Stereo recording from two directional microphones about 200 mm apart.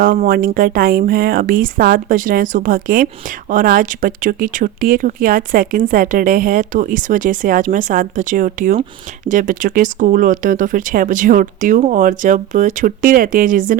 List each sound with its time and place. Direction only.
0.0 s speech: 45° right (ahead or behind)